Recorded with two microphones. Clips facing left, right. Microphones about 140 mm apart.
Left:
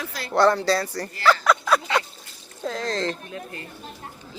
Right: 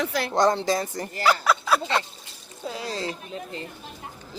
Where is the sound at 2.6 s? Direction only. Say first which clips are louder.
Left 4 dB; 10° right (ahead or behind).